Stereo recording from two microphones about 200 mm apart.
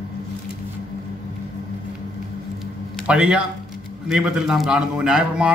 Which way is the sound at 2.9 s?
5° right (ahead or behind).